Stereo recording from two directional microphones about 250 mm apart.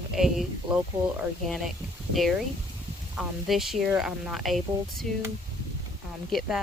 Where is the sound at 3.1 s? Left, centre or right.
Centre.